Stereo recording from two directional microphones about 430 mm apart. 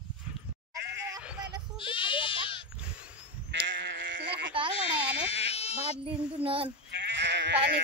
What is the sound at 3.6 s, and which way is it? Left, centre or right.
Sheep, right.